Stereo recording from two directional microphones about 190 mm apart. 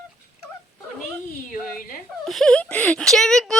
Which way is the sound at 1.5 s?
45° left (ahead or behind).